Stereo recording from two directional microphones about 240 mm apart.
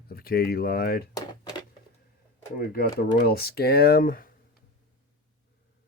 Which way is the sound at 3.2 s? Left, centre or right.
Left.